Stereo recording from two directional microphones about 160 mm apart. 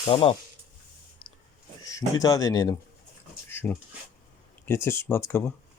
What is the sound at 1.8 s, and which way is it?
Speech, 20° left (ahead or behind).